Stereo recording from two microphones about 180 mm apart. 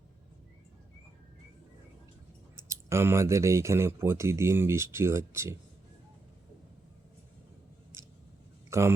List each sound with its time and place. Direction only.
2.6 s speech: 15° right (ahead or behind)
8.7 s speech: 15° right (ahead or behind)